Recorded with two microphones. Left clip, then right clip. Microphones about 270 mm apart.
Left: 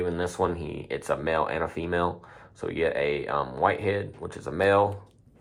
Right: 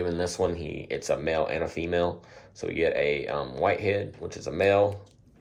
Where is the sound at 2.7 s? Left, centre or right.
Left.